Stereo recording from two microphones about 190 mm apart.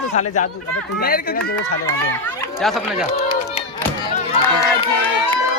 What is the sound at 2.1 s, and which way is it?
Chatter, 10° left (ahead or behind).